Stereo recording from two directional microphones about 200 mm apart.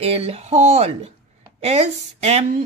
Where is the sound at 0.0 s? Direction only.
30° right (ahead or behind).